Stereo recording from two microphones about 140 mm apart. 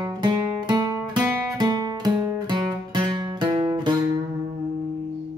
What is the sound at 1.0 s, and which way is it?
Music, 10° right (ahead or behind).